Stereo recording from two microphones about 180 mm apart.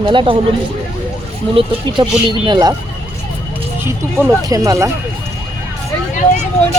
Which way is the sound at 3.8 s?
15° right (ahead or behind).